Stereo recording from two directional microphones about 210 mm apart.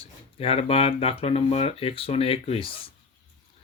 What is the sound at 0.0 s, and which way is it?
Speech, 30° left (ahead or behind).